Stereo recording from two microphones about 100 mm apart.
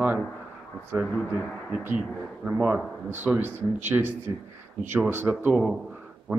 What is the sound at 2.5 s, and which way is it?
A man's voice, 10° right (ahead or behind).